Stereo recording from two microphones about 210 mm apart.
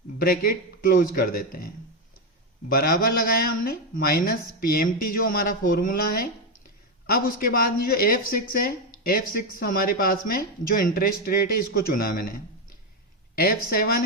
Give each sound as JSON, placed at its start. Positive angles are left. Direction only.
{"t": 0.2, "sound": "speech", "side_deg": 45}